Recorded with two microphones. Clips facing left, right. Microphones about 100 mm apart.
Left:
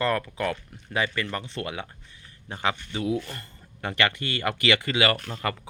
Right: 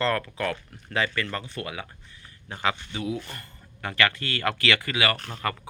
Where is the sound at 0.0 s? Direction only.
15° left (ahead or behind).